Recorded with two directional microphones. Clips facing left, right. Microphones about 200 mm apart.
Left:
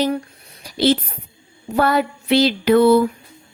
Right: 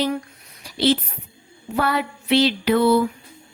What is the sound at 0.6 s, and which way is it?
Speech, 40° left (ahead or behind).